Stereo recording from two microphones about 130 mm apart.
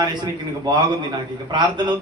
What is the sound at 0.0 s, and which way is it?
A man's voice, 35° right (ahead or behind).